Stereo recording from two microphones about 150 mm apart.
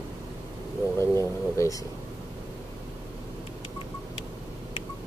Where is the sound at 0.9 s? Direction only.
20° left (ahead or behind).